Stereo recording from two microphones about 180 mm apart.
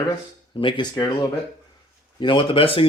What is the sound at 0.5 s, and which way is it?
Speech, 25° left (ahead or behind).